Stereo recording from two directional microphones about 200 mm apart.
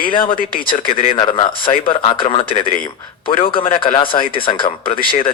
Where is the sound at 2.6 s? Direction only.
40° left (ahead or behind).